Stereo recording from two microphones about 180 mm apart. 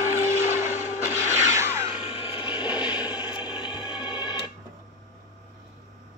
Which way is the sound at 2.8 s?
20° left (ahead or behind).